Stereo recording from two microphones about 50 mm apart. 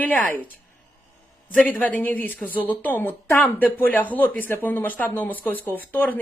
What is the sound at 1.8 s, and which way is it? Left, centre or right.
Speech, left.